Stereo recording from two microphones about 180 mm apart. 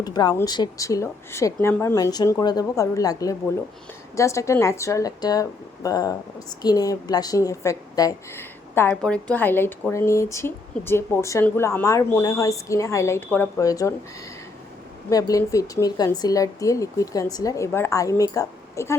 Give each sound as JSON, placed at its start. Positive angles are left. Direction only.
{"t": 0.0, "sound": "speech", "side_deg": 20}
{"t": 15.1, "sound": "speech", "side_deg": 20}